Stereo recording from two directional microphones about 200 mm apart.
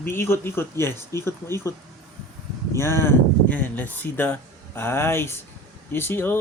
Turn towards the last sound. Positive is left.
turn(degrees=10)  # may be behind; listen again after turning